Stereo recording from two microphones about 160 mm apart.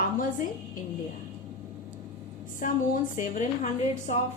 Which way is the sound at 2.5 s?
55° left (ahead or behind).